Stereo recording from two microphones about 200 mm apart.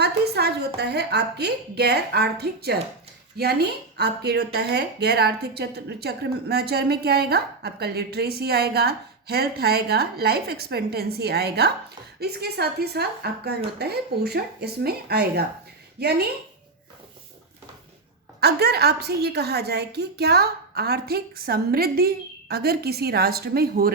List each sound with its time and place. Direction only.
0.0 s a woman's voice: 55° right (ahead or behind)
18.3 s speech: 55° right (ahead or behind)